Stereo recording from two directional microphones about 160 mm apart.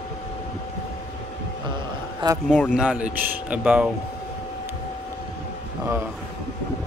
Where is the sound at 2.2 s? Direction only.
30° right (ahead or behind).